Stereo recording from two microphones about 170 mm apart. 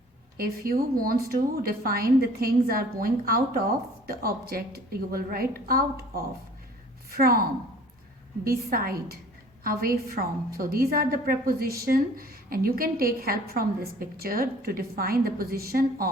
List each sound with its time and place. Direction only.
0.3 s a woman's voice: 60° right (ahead or behind)
8.4 s a woman's voice: 60° right (ahead or behind)